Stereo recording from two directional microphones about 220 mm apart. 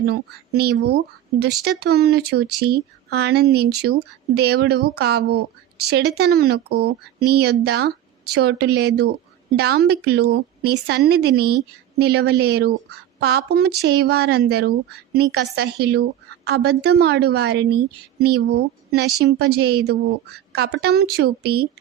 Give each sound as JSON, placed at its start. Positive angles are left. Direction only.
{"t": 0.1, "sound": "a woman's voice", "side_deg": -45}